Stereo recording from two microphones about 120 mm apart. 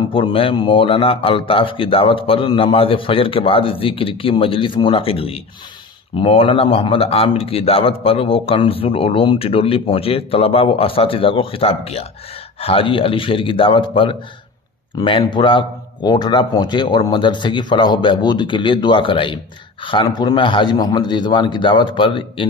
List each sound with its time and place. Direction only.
0.1 s a man's voice: 45° left (ahead or behind)